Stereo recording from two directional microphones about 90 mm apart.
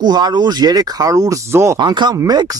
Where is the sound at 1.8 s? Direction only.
55° right (ahead or behind).